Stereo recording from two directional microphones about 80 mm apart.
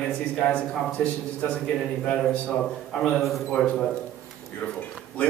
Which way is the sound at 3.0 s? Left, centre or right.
Centre.